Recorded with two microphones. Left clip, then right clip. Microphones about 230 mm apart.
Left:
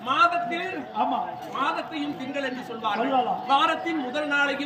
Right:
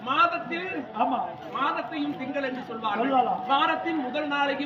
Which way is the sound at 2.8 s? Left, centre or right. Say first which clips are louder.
Even; centre.